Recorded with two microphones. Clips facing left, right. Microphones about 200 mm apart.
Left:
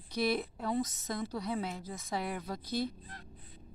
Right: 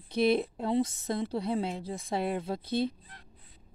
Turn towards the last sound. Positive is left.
turn(degrees=45)  # may be behind; listen again after turning